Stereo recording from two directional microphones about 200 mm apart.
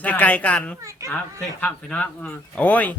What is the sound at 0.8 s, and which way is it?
Speech, 15° right (ahead or behind).